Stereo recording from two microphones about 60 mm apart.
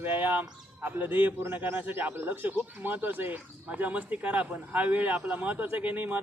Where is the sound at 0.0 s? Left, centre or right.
Right.